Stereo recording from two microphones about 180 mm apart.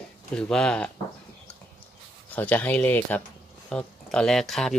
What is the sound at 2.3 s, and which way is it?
Speech, 10° left (ahead or behind).